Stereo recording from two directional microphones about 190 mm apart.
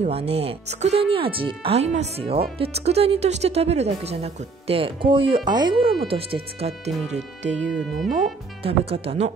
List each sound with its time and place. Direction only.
0.0 s speech: 30° right (ahead or behind)
7.6 s speech: centre (ahead or behind)
8.6 s speech: 30° right (ahead or behind)